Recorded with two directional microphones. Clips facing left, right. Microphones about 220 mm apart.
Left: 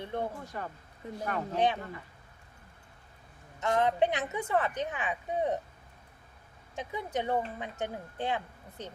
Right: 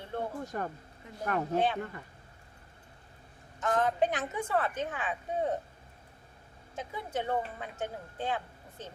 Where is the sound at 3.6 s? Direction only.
15° left (ahead or behind).